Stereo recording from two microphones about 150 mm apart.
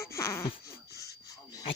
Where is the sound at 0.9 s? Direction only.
20° left (ahead or behind).